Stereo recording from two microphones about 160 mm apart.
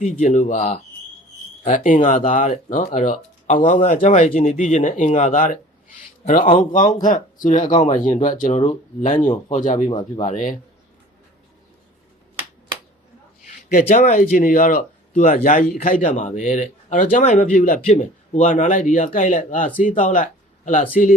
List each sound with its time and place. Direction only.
0.0 s speech: 50° left (ahead or behind)
6.7 s speech: 55° left (ahead or behind)
13.7 s speech: 60° left (ahead or behind)
15.2 s speech: 50° left (ahead or behind)
17.7 s speech: 45° left (ahead or behind)